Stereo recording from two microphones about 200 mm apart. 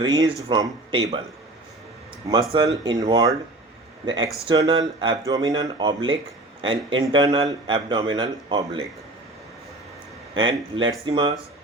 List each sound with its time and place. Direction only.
0.0 s speech: 15° right (ahead or behind)
2.8 s speech: 20° right (ahead or behind)
10.3 s speech: 25° right (ahead or behind)